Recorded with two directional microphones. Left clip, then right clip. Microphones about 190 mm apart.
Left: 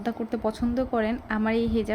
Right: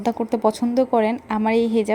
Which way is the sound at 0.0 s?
30° right (ahead or behind).